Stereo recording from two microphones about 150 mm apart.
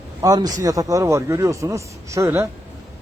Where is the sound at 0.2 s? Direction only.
25° right (ahead or behind).